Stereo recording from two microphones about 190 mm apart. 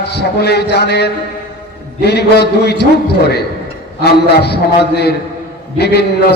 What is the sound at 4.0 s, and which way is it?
A man's voice, 60° left (ahead or behind).